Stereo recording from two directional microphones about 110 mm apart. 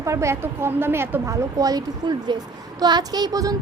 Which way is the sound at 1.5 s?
35° right (ahead or behind).